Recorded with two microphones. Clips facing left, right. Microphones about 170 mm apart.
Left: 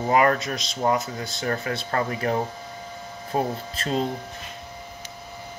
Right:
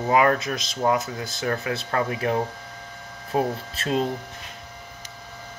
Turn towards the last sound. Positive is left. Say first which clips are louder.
# right 1 dB
turn(degrees=-5)  # may be behind; listen again after turning